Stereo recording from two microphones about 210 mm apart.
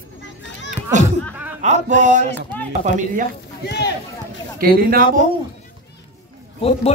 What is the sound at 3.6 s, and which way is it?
Speech, 50° left (ahead or behind).